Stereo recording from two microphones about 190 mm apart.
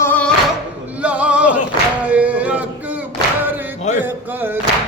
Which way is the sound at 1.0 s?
5° right (ahead or behind).